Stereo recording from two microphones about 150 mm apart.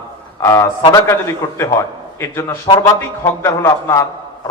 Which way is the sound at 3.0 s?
20° left (ahead or behind).